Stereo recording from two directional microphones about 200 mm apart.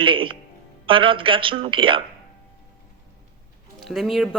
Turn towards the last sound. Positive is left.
turn(degrees=0)  # may be behind; listen again after turning